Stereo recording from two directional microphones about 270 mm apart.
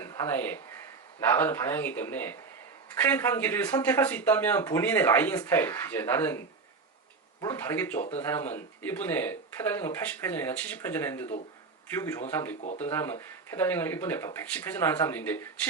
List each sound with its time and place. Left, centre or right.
0.0 s speech: centre
7.4 s speech: centre